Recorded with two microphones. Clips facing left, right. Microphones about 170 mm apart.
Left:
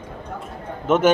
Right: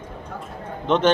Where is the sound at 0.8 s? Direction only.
5° left (ahead or behind).